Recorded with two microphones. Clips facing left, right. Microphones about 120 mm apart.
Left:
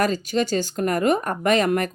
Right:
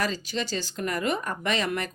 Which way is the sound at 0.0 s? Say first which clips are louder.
Left 8 dB; 50° left (ahead or behind).